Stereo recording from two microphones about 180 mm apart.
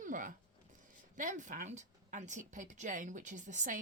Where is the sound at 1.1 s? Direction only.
45° right (ahead or behind).